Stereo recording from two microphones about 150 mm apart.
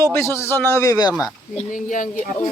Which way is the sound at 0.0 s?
20° left (ahead or behind).